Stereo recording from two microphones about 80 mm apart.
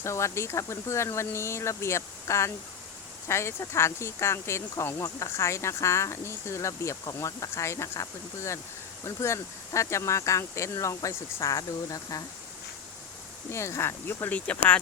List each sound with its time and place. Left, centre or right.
0.0 s speech: left
13.5 s speech: left
14.3 s speech: centre